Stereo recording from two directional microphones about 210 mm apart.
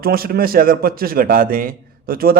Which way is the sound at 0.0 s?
45° right (ahead or behind).